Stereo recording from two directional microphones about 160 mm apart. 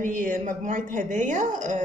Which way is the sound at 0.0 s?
60° right (ahead or behind).